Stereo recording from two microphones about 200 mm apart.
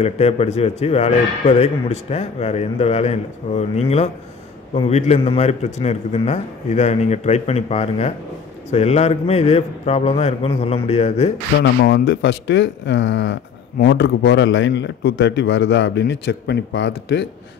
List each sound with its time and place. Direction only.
0.0 s a man's voice: 30° left (ahead or behind)
11.6 s speech: 65° left (ahead or behind)